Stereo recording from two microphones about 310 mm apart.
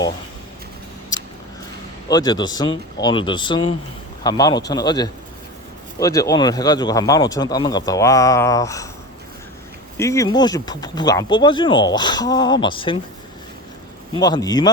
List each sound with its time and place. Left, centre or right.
2.0 s speech: centre
10.0 s speech: centre
14.2 s speech: centre